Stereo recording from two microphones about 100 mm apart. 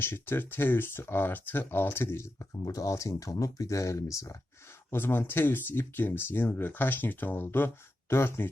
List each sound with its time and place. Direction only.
0.0 s speech: 20° left (ahead or behind)
2.5 s speech: 35° left (ahead or behind)
4.9 s speech: 20° left (ahead or behind)